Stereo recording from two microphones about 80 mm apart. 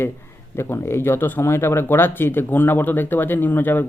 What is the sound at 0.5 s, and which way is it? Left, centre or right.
Speech, left.